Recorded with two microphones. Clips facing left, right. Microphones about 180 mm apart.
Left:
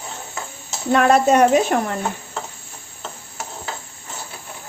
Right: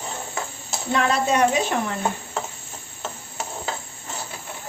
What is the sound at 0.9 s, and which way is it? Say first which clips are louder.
Speech: left 6 dB; 50° left (ahead or behind).